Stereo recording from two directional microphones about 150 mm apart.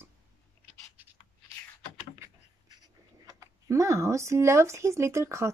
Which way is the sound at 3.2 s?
20° right (ahead or behind).